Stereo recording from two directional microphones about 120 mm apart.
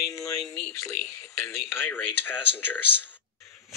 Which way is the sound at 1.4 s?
20° left (ahead or behind).